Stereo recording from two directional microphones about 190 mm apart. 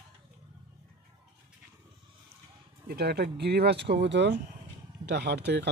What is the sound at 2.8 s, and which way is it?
Speech, 55° right (ahead or behind).